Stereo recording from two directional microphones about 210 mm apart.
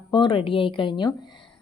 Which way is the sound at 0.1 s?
25° left (ahead or behind).